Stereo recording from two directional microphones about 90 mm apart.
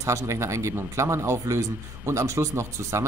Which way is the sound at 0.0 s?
35° right (ahead or behind).